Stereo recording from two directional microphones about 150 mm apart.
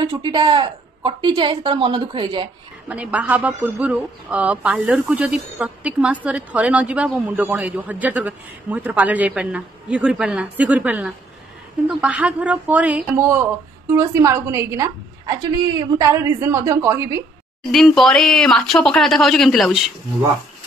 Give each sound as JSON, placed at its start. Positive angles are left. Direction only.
{"t": 0.0, "sound": "a woman's voice", "side_deg": -30}
{"t": 2.9, "sound": "a woman's voice", "side_deg": -10}
{"t": 17.6, "sound": "speech", "side_deg": 0}